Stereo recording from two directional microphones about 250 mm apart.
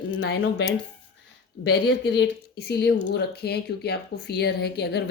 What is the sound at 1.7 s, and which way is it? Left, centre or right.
Speech, left.